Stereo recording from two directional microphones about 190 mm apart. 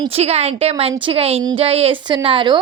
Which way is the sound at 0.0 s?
35° right (ahead or behind).